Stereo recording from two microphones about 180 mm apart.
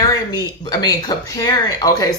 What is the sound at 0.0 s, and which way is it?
A woman's voice, 20° left (ahead or behind).